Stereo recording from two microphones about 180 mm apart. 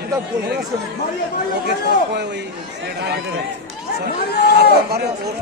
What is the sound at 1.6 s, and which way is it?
Speech, 70° right (ahead or behind).